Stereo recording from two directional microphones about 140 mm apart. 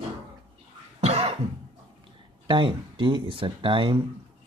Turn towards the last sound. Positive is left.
turn(degrees=-35)  # may be behind; listen again after turning